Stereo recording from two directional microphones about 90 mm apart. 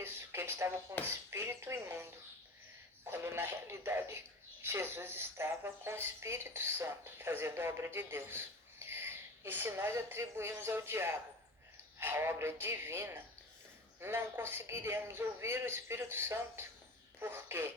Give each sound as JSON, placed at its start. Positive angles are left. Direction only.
{"t": 0.0, "sound": "a sound", "side_deg": -25}
{"t": 0.9, "sound": "a woman's voice", "side_deg": -30}
{"t": 3.1, "sound": "a woman's voice", "side_deg": -25}